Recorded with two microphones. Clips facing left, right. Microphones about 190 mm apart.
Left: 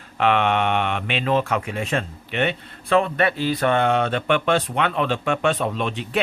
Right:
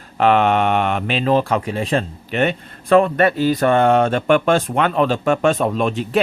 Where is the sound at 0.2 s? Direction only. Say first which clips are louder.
Right 5 dB; 40° right (ahead or behind).